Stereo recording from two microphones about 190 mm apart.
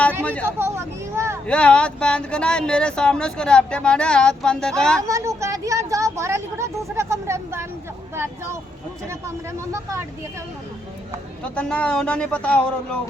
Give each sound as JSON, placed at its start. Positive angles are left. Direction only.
{"t": 0.4, "sound": "vehicle", "side_deg": -15}
{"t": 1.5, "sound": "speech", "side_deg": 5}
{"t": 5.0, "sound": "speech", "side_deg": -15}
{"t": 11.4, "sound": "speech", "side_deg": 5}